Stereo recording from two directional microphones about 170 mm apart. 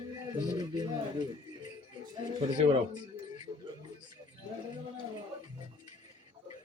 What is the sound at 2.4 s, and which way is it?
Speech, 35° right (ahead or behind).